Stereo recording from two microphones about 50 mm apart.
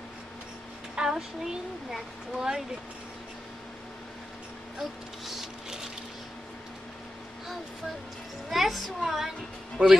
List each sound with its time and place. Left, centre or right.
0.9 s speech: centre
4.7 s a sound: centre
8.5 s a woman's voice: centre
9.8 s a man's voice: right